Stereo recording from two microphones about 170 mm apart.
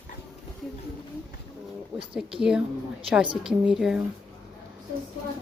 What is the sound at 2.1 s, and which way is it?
Speech, 5° right (ahead or behind).